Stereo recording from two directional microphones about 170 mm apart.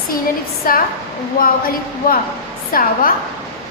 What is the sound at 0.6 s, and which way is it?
Speech, 60° left (ahead or behind).